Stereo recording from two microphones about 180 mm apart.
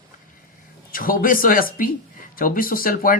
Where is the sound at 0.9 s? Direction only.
50° left (ahead or behind).